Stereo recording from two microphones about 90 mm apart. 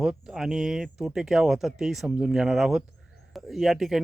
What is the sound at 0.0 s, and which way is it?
Speech, 5° right (ahead or behind).